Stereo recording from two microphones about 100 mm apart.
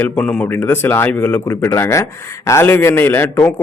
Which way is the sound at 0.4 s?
20° left (ahead or behind).